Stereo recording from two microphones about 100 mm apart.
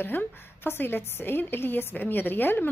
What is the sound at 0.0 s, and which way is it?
A woman's voice, 20° left (ahead or behind).